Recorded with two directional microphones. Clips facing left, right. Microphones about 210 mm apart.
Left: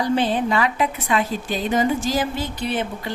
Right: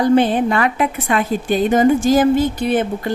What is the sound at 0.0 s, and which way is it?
A woman's voice, 55° right (ahead or behind).